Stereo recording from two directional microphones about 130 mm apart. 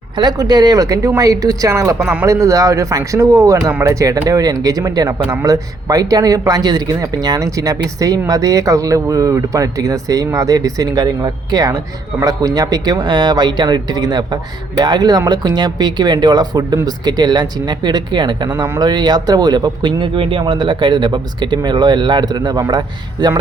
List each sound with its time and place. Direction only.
0.2 s speech: 30° right (ahead or behind)
3.7 s speech: 15° right (ahead or behind)
4.0 s speech: 25° right (ahead or behind)